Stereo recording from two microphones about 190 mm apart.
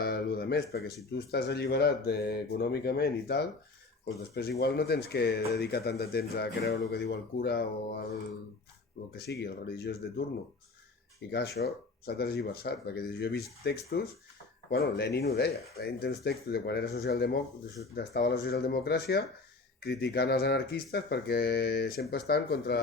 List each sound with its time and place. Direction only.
0.0 s a sound: 55° left (ahead or behind)
1.3 s speech: 55° left (ahead or behind)
9.1 s speech: 60° left (ahead or behind)
11.3 s speech: 55° left (ahead or behind)